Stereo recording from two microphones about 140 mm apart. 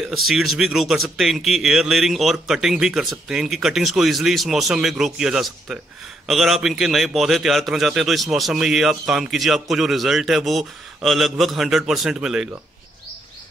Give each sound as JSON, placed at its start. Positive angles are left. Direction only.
{"t": 0.1, "sound": "a man's voice", "side_deg": 0}